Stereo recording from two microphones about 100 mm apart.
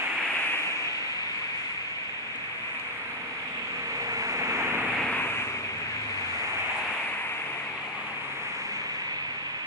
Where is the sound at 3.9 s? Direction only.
35° right (ahead or behind).